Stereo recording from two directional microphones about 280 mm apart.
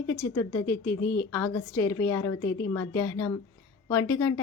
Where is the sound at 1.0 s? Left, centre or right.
Left.